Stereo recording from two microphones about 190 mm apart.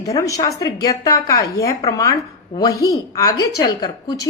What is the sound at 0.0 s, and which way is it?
A woman's voice, 15° left (ahead or behind).